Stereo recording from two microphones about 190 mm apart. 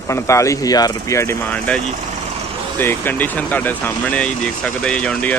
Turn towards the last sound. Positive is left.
turn(degrees=5)  # may be behind; listen again after turning